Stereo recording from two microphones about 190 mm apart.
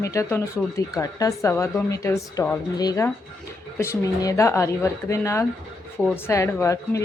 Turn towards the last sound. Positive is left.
turn(degrees=15)  # may be behind; listen again after turning